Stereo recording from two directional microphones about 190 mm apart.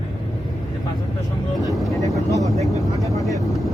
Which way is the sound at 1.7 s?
Centre (ahead or behind).